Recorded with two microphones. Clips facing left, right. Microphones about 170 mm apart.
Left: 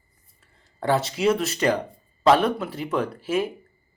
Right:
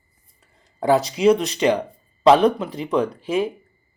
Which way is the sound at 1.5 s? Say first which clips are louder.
Right 3 dB; 15° right (ahead or behind).